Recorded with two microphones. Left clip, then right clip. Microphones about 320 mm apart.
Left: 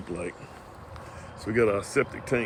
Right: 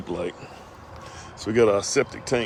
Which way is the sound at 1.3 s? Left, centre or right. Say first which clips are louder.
Right 5 dB; centre.